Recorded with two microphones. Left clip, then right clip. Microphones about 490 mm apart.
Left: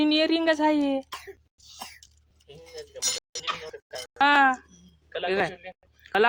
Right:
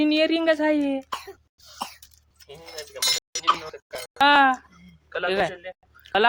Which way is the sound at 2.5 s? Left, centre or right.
Left.